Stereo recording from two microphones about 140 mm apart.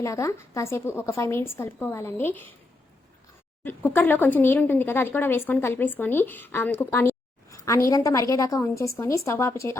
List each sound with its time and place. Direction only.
0.0 s a woman's voice: 20° left (ahead or behind)
3.6 s a woman's voice: 15° left (ahead or behind)